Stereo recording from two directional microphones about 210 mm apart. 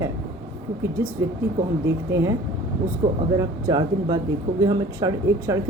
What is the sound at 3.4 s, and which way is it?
Speech, 20° right (ahead or behind).